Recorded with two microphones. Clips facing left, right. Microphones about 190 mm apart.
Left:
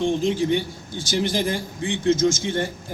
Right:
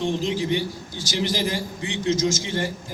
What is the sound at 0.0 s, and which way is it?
A man's voice, 50° left (ahead or behind).